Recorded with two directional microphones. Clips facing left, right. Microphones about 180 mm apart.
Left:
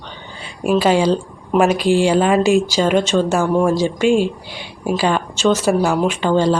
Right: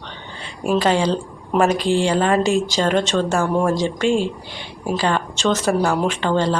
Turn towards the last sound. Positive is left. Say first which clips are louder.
# left 4 dB
turn(degrees=10)  # may be behind; listen again after turning